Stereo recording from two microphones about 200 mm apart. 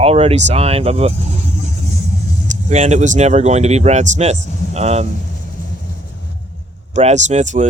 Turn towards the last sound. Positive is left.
turn(degrees=-35)  # may be behind; listen again after turning